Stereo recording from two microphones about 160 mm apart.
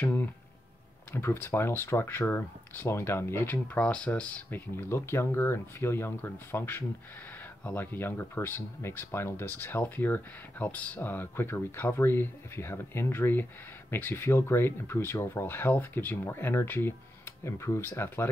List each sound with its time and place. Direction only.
0.0 s speech: 15° left (ahead or behind)